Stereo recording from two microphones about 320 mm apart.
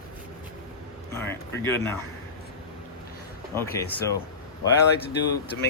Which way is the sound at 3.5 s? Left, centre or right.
Centre.